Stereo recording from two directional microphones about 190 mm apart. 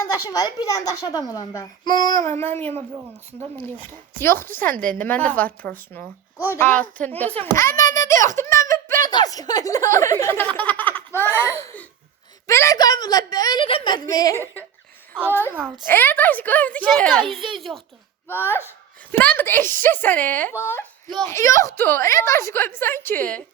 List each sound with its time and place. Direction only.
0.0 s a child's voice: 20° left (ahead or behind)
4.2 s a woman's voice: 10° left (ahead or behind)
18.3 s a woman's voice: 10° left (ahead or behind)